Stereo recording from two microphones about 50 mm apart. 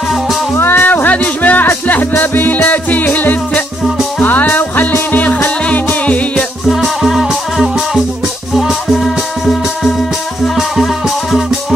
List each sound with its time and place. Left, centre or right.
0.6 s music: left
6.7 s music: centre